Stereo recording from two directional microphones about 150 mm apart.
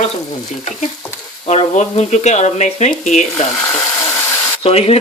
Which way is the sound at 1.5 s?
45° left (ahead or behind).